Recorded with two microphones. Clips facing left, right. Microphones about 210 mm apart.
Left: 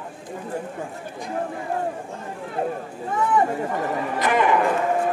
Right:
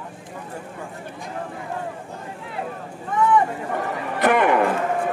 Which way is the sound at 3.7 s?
60° right (ahead or behind).